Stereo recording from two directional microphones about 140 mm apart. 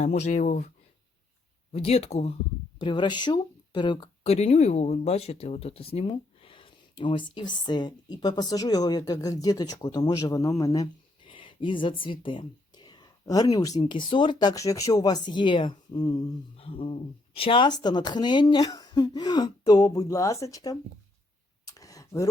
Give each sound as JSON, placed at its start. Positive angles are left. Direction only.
{"t": 0.0, "sound": "speech", "side_deg": 55}
{"t": 1.7, "sound": "speech", "side_deg": 45}
{"t": 2.7, "sound": "speech", "side_deg": 35}
{"t": 4.2, "sound": "speech", "side_deg": 50}
{"t": 11.3, "sound": "speech", "side_deg": 35}
{"t": 16.6, "sound": "speech", "side_deg": 40}
{"t": 21.7, "sound": "tick", "side_deg": 25}